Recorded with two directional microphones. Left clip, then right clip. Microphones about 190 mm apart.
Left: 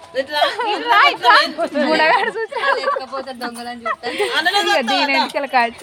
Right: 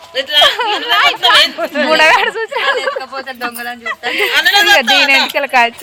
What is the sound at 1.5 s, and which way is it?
Speech, 20° right (ahead or behind).